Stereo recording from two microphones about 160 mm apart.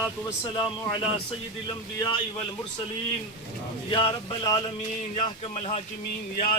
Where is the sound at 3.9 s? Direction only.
35° left (ahead or behind).